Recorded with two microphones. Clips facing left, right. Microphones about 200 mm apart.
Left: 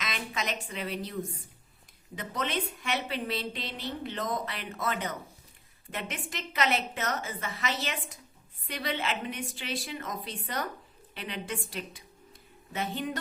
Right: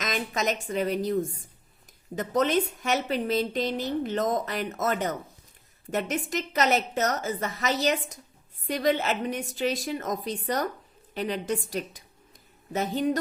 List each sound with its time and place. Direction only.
0.0 s a woman's voice: 45° right (ahead or behind)